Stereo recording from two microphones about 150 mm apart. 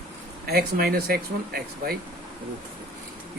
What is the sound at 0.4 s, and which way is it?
Speech, 90° right.